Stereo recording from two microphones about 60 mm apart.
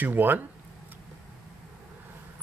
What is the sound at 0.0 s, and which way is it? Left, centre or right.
Speech, right.